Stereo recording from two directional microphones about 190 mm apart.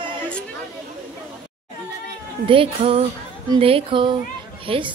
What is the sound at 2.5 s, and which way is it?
Speech, 30° right (ahead or behind).